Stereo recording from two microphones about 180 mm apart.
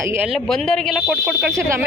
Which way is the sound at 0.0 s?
15° right (ahead or behind).